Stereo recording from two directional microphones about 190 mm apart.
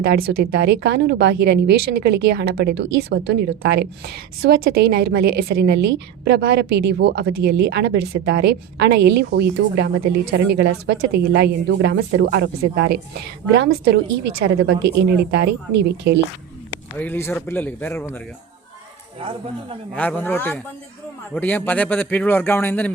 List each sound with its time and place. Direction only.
0.0 s speech: 55° right (ahead or behind)
17.0 s speech: 10° left (ahead or behind)
20.0 s speech: 10° left (ahead or behind)